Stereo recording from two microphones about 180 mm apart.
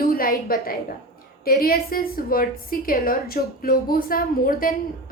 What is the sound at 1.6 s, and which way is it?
A woman's voice, 55° left (ahead or behind).